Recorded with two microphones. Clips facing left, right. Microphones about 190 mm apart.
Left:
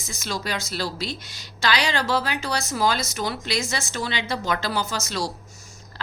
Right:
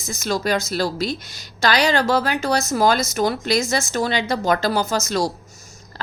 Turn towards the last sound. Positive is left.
turn(degrees=-45)  # may be behind; listen again after turning